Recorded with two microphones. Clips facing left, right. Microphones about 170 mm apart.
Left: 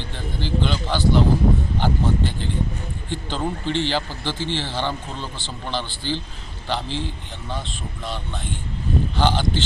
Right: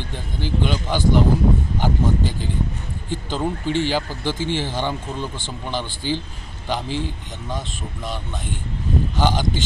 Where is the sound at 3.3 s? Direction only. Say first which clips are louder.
Right 2 dB; 10° right (ahead or behind).